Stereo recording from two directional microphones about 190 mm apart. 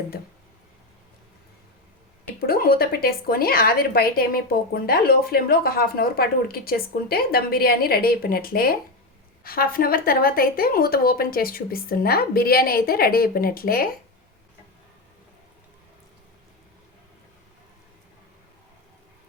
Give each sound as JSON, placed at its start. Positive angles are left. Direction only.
{"t": 2.5, "sound": "a woman's voice", "side_deg": 50}